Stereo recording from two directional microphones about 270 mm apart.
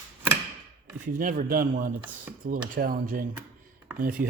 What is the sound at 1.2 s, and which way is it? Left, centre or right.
Speech, right.